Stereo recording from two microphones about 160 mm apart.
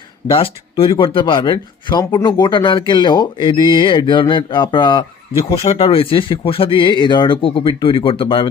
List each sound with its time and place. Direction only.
0.3 s speech: 35° left (ahead or behind)